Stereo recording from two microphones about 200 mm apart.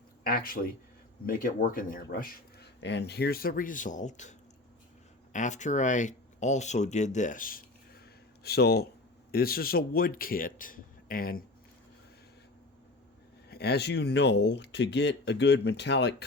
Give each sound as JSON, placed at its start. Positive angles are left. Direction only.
{"t": 0.3, "sound": "speech", "side_deg": 45}
{"t": 13.5, "sound": "speech", "side_deg": 55}